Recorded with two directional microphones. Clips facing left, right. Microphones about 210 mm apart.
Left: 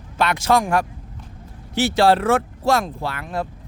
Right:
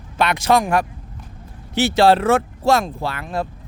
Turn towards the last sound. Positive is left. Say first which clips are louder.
# right 2 dB
turn(degrees=-30)  # may be behind; listen again after turning